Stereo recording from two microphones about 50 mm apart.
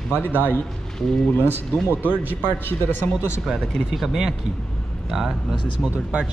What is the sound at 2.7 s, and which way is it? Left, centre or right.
Speech, left.